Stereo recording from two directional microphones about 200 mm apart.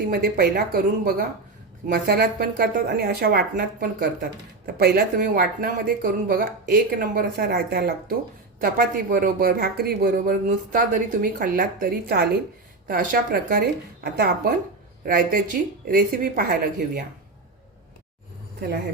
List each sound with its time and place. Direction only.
0.1 s a woman's voice: 50° right (ahead or behind)